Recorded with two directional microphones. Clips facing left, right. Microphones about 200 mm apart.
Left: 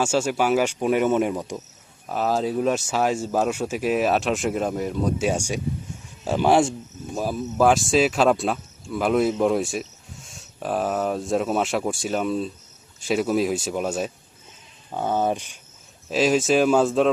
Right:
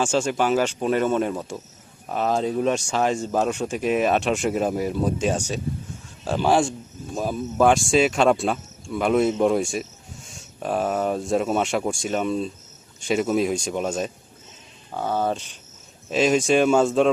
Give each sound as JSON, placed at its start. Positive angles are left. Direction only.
{"t": 0.0, "sound": "speech", "side_deg": 10}
{"t": 2.0, "sound": "speech", "side_deg": 0}
{"t": 5.2, "sound": "speech", "side_deg": 10}
{"t": 7.1, "sound": "speech", "side_deg": 5}
{"t": 14.9, "sound": "speech", "side_deg": 15}
{"t": 16.0, "sound": "speech", "side_deg": 0}